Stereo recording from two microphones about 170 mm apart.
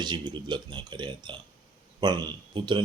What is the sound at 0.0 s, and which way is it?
Speech, 25° right (ahead or behind).